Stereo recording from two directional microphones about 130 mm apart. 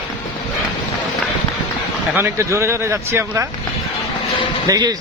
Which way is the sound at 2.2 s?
20° right (ahead or behind).